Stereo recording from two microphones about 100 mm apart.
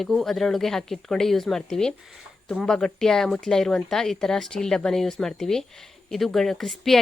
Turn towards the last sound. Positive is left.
turn(degrees=0)  # may be behind; listen again after turning